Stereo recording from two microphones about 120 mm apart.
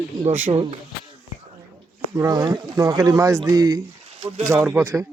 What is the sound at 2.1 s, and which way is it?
Speech, 30° right (ahead or behind).